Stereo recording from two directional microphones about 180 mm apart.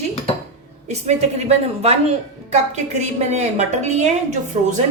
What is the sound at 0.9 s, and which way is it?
A woman's voice, 40° right (ahead or behind).